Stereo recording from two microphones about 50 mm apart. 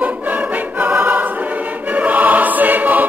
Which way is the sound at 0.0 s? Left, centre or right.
Right.